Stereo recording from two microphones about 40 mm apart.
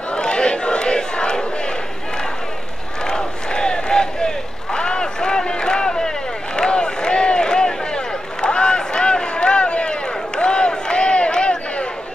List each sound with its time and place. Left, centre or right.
0.1 s crowd: left
3.1 s crowd: left
4.7 s a sound: left